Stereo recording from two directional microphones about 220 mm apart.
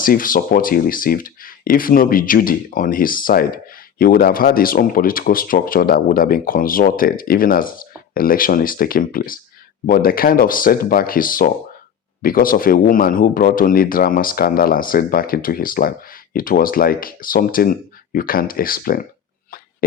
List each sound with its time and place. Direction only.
0.0 s speech: 40° left (ahead or behind)